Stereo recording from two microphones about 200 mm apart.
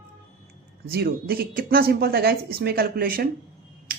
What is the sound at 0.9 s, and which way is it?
Speech, 50° right (ahead or behind).